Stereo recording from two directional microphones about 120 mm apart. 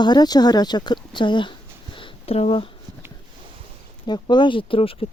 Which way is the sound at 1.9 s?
50° left (ahead or behind).